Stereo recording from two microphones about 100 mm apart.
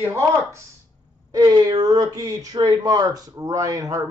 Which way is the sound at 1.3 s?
40° right (ahead or behind).